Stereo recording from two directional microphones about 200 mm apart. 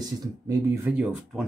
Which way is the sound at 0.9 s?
5° right (ahead or behind).